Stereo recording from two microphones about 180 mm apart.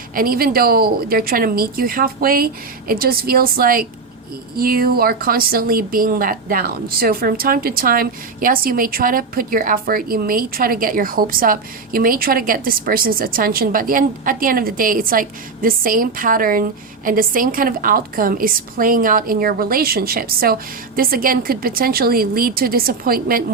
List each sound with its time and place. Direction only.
0.1 s a woman's voice: 55° right (ahead or behind)